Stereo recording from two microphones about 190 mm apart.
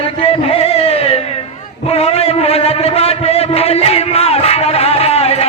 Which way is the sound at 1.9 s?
30° left (ahead or behind).